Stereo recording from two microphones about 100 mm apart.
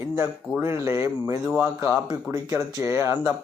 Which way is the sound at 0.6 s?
30° right (ahead or behind).